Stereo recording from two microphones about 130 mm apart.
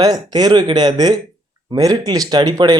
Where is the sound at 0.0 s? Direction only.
30° right (ahead or behind).